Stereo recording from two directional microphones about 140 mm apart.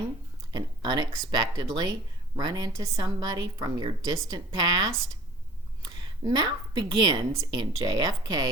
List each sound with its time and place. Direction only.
0.5 s a woman's voice: 30° right (ahead or behind)